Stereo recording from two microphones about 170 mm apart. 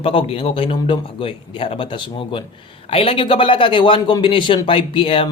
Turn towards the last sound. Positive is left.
turn(degrees=30)  # may be behind; listen again after turning